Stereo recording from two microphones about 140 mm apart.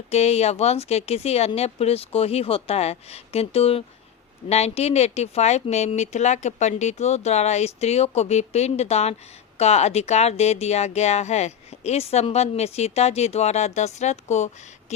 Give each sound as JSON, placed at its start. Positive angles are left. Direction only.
{"t": 0.1, "sound": "speech", "side_deg": 50}